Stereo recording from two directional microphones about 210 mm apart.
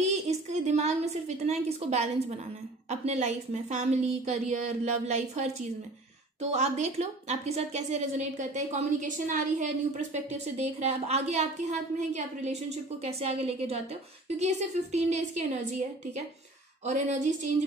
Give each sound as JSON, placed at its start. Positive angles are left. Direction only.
{"t": 0.0, "sound": "a woman's voice", "side_deg": -30}
{"t": 16.8, "sound": "a woman's voice", "side_deg": -35}